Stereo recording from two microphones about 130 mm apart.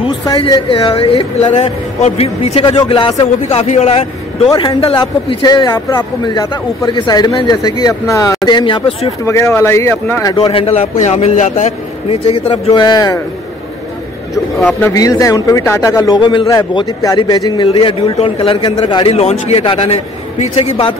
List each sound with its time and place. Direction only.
0.4 s speech: 40° left (ahead or behind)
2.7 s speech: 40° left (ahead or behind)
3.4 s speech: 60° left (ahead or behind)
4.5 s speech: 35° left (ahead or behind)
8.5 s speech: 35° left (ahead or behind)
9.2 s a man's voice: 20° left (ahead or behind)
10.3 s speech: 45° left (ahead or behind)
11.0 s speech: 60° left (ahead or behind)
12.1 s speech: 45° left (ahead or behind)
12.8 s a man's voice: 25° left (ahead or behind)
14.8 s a man's voice: 25° left (ahead or behind)
17.6 s speech: 45° left (ahead or behind)
19.1 s speech: 55° left (ahead or behind)
19.6 s speech: 45° left (ahead or behind)